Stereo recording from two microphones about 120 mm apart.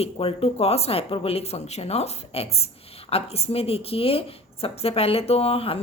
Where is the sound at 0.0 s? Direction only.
55° left (ahead or behind).